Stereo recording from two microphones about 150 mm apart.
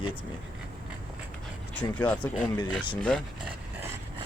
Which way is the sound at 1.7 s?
10° left (ahead or behind).